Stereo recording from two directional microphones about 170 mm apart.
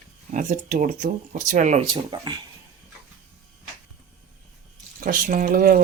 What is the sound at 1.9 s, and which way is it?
Speech, 25° right (ahead or behind).